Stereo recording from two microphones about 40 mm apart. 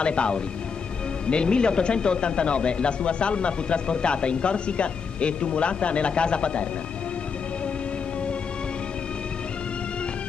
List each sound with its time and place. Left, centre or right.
0.0 s speech: left